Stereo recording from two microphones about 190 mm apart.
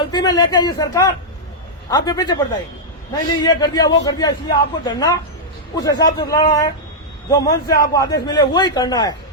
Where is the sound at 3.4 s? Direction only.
20° left (ahead or behind).